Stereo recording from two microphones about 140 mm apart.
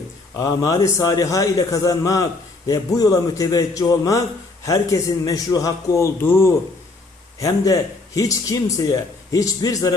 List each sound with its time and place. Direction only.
0.3 s a man's voice: 25° left (ahead or behind)